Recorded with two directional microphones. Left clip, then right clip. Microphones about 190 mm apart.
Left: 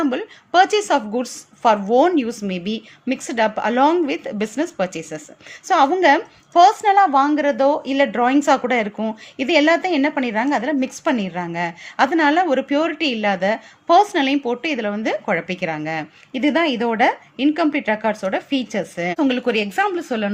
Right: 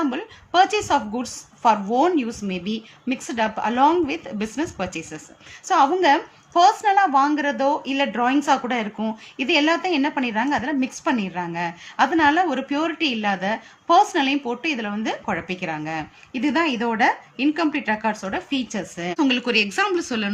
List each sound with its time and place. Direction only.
0.0 s a woman's voice: 30° left (ahead or behind)